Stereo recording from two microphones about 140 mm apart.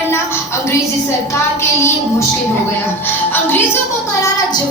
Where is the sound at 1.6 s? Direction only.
20° left (ahead or behind).